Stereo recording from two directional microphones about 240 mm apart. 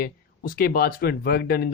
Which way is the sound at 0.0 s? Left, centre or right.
Left.